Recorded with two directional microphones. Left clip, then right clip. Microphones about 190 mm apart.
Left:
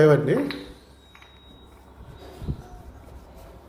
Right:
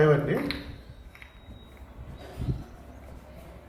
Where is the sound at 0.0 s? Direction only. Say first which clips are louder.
Left 5 dB; 45° left (ahead or behind).